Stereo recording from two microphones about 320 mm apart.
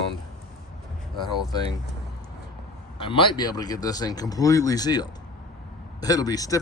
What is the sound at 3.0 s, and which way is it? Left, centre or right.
Speech, centre.